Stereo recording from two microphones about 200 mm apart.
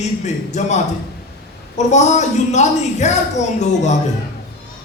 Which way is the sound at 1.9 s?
35° left (ahead or behind).